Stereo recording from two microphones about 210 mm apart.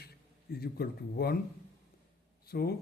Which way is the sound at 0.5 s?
50° left (ahead or behind).